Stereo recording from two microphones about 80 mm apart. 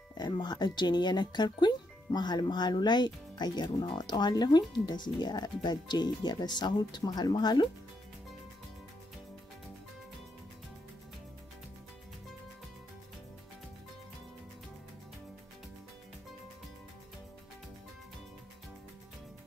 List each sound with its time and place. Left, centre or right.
0.2 s speech: left